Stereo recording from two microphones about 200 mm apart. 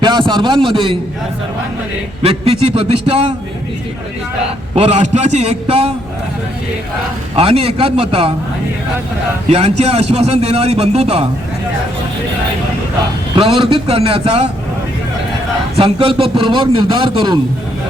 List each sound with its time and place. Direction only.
0.0 s a man's voice: 25° right (ahead or behind)
2.2 s a man's voice: 30° right (ahead or behind)
4.7 s a man's voice: 30° right (ahead or behind)
7.3 s a man's voice: 30° right (ahead or behind)
9.5 s a man's voice: 30° right (ahead or behind)
13.3 s a man's voice: 25° right (ahead or behind)
15.7 s a man's voice: 25° right (ahead or behind)